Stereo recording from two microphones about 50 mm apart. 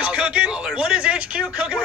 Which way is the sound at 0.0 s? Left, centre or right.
Right.